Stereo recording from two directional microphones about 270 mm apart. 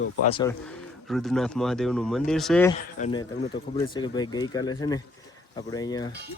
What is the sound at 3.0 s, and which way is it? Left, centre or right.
Speech, centre.